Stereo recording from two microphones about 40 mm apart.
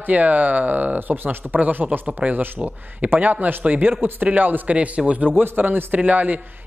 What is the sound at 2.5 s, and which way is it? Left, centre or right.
Speech, right.